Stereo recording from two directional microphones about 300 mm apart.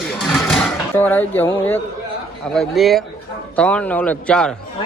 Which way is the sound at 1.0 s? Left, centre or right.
Centre.